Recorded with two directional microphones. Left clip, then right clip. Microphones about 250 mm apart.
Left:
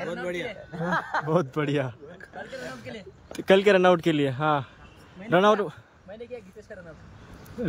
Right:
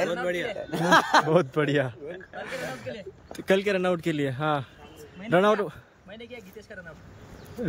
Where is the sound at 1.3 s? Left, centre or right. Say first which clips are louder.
Right 2 dB; centre.